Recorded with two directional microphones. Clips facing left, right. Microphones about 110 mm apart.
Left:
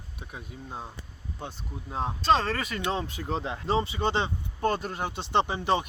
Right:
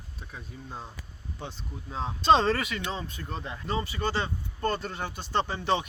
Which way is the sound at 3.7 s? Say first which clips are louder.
Left 4 dB; 25° left (ahead or behind).